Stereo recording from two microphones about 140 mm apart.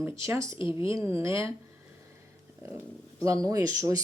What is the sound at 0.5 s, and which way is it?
Speech, 40° left (ahead or behind).